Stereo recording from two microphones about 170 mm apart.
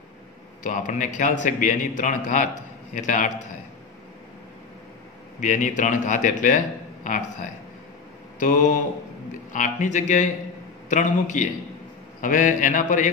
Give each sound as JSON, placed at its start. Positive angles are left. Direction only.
{"t": 0.7, "sound": "a man's voice", "side_deg": 50}
{"t": 5.4, "sound": "a man's voice", "side_deg": 50}
{"t": 8.4, "sound": "a man's voice", "side_deg": 50}